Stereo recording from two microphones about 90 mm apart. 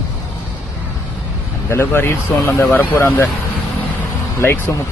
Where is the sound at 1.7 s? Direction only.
25° left (ahead or behind).